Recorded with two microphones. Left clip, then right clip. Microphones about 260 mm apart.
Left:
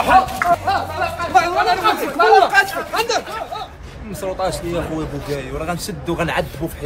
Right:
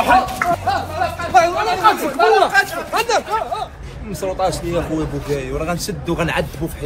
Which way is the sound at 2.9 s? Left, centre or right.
Right.